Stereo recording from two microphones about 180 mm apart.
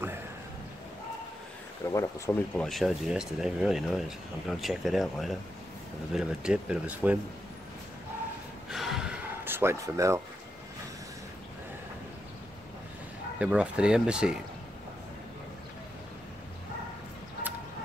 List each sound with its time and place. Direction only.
1.9 s speech: 15° left (ahead or behind)
2.6 s speech: centre (ahead or behind)
8.6 s a sound: centre (ahead or behind)
13.4 s speech: 5° right (ahead or behind)